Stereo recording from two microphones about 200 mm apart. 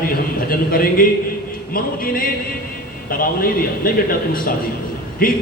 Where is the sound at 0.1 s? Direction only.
45° left (ahead or behind).